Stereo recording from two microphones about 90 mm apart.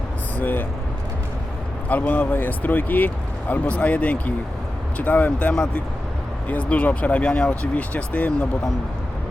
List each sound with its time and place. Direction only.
0.3 s speech: 20° left (ahead or behind)
1.9 s speech: 20° left (ahead or behind)